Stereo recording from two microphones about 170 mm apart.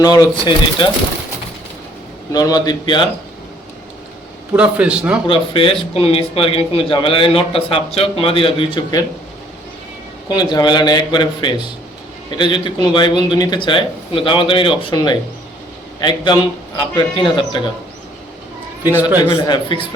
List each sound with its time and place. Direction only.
0.0 s speech: 25° left (ahead or behind)
2.3 s speech: 20° left (ahead or behind)
4.5 s a man's voice: 5° right (ahead or behind)
5.2 s a man's voice: 30° left (ahead or behind)
10.2 s speech: 25° left (ahead or behind)
19.3 s speech: 25° left (ahead or behind)